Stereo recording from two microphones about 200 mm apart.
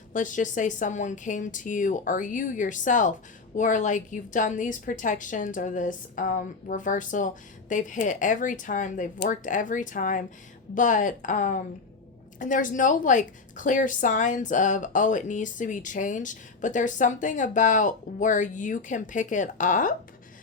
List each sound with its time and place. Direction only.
0.1 s a woman's voice: 40° left (ahead or behind)